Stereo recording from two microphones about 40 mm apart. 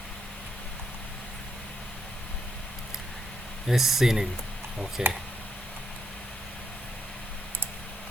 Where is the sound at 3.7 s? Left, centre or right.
Centre.